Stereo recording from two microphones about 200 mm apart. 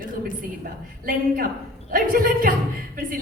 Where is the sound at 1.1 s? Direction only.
45° right (ahead or behind).